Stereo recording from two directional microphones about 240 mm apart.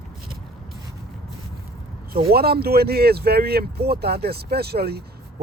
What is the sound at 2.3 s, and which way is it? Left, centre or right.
Speech, right.